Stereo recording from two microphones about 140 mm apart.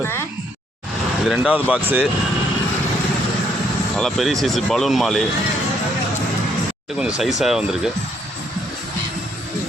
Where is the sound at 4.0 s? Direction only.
5° left (ahead or behind).